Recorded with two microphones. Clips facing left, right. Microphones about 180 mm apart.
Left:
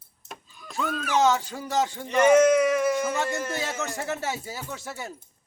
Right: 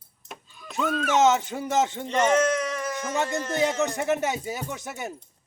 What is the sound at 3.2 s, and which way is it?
Speech, 20° right (ahead or behind).